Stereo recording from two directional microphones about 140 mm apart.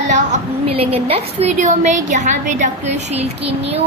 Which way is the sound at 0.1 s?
50° right (ahead or behind).